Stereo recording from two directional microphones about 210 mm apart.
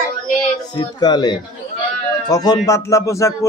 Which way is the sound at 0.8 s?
20° left (ahead or behind).